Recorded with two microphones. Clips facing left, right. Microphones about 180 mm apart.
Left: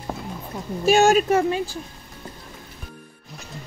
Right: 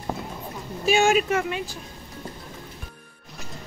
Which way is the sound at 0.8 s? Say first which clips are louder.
Left 4 dB; 40° left (ahead or behind).